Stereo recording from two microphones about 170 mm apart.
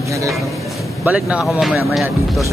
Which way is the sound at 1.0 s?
5° right (ahead or behind).